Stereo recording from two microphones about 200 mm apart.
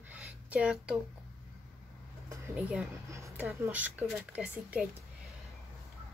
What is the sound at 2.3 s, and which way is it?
Speech, 5° right (ahead or behind).